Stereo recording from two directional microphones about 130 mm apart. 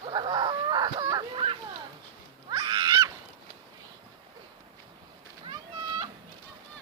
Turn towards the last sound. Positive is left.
turn(degrees=-30)  # may be behind; listen again after turning